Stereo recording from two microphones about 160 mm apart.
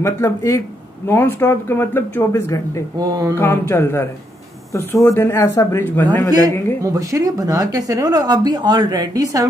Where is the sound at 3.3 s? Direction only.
15° left (ahead or behind).